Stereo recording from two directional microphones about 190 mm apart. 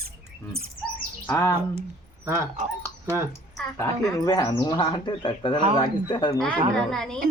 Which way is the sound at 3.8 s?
20° left (ahead or behind).